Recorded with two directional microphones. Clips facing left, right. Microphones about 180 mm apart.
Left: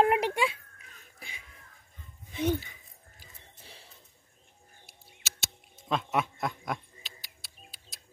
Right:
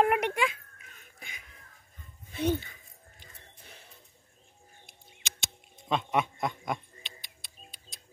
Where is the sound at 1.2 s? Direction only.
30° left (ahead or behind).